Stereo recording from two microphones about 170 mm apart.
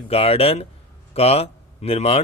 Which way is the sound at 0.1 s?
35° left (ahead or behind).